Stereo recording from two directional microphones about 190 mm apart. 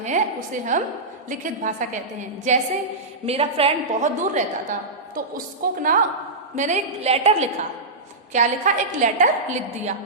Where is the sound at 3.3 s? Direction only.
30° right (ahead or behind).